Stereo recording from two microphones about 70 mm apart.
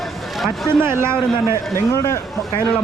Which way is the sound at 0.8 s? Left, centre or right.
Right.